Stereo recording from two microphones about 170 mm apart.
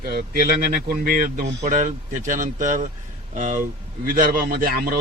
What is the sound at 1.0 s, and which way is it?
Speech, 55° right (ahead or behind).